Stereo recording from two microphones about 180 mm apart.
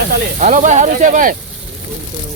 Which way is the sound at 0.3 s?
45° right (ahead or behind).